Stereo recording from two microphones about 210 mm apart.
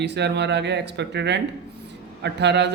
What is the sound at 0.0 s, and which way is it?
Speech, 55° right (ahead or behind).